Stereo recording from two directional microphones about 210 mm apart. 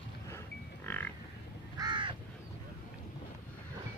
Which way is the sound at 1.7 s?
20° right (ahead or behind).